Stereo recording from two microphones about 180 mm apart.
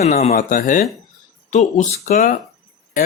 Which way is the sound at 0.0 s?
40° left (ahead or behind).